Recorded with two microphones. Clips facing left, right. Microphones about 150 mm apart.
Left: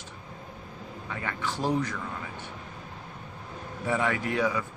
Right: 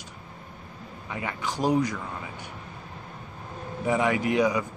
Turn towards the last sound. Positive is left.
turn(degrees=-15)  # may be behind; listen again after turning